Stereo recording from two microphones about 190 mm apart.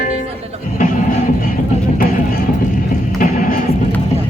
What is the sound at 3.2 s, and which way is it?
Music, 50° left (ahead or behind).